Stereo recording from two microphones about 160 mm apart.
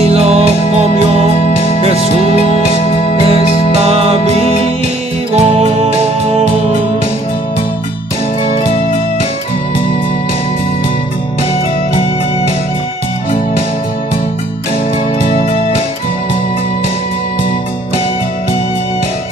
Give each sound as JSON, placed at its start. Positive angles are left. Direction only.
{"t": 0.0, "sound": "music", "side_deg": -40}
{"t": 3.8, "sound": "music", "side_deg": -40}
{"t": 5.3, "sound": "music", "side_deg": -45}